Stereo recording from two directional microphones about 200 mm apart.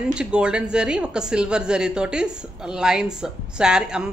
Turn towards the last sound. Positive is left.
turn(degrees=-5)  # may be behind; listen again after turning